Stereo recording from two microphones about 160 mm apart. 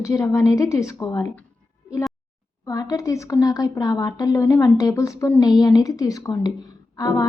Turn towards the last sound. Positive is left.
turn(degrees=20)  # may be behind; listen again after turning